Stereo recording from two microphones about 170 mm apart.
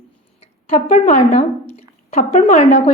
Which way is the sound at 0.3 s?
35° left (ahead or behind).